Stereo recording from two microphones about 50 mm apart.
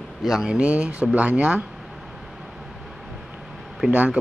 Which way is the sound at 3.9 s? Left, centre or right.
Right.